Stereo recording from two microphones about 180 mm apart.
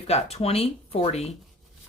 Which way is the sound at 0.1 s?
35° left (ahead or behind).